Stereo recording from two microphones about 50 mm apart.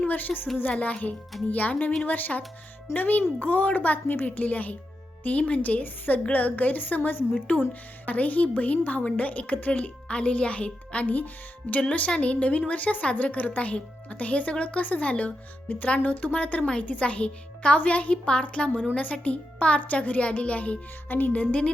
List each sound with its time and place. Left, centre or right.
0.1 s a woman's voice: left
11.0 s a woman's voice: left